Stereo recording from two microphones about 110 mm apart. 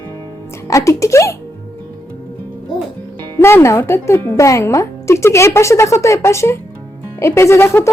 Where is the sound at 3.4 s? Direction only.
20° left (ahead or behind).